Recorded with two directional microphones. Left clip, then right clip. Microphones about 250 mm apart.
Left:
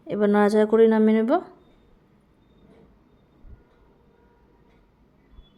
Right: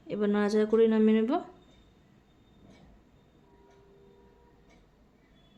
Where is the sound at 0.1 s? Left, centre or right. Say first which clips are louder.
Left 8 dB; centre.